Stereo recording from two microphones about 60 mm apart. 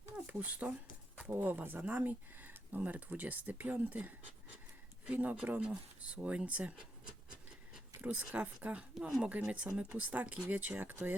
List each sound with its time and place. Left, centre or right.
0.3 s speech: right
8.0 s speech: right
9.0 s speech: centre
9.5 s speech: right